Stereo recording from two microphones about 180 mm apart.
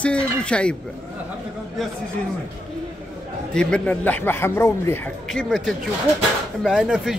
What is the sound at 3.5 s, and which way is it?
A man's voice, 5° left (ahead or behind).